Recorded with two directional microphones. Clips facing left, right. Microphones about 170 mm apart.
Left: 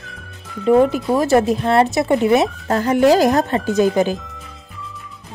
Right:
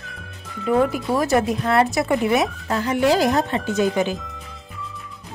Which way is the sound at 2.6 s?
45° left (ahead or behind).